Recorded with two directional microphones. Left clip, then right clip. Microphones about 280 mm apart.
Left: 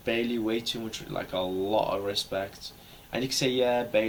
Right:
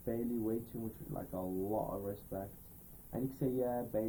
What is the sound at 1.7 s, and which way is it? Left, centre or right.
Speech, left.